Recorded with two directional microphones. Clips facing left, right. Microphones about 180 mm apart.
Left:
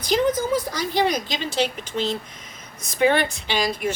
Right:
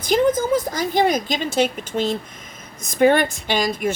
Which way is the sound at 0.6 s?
50° right (ahead or behind).